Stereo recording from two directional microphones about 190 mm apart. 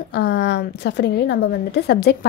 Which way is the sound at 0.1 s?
65° left (ahead or behind).